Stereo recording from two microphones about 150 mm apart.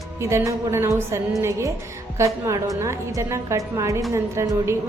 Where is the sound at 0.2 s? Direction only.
20° right (ahead or behind).